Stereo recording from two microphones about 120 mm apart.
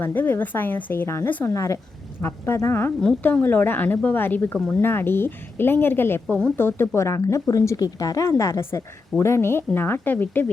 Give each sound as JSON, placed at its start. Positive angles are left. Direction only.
{"t": 0.0, "sound": "speech", "side_deg": 15}
{"t": 3.0, "sound": "speech", "side_deg": 10}
{"t": 6.2, "sound": "speech", "side_deg": 10}
{"t": 6.6, "sound": "speech", "side_deg": 20}